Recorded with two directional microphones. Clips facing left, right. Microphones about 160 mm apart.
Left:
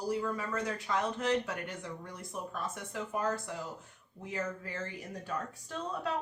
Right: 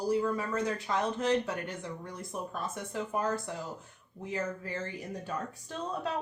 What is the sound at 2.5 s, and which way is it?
Speech, 30° right (ahead or behind).